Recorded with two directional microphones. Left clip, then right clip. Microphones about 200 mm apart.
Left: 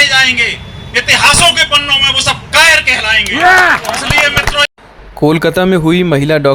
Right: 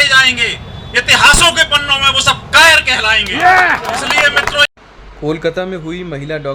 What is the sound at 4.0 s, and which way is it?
Vehicle, 20° right (ahead or behind).